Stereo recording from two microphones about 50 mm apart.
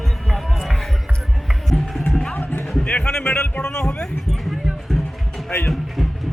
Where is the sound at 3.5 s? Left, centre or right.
Centre.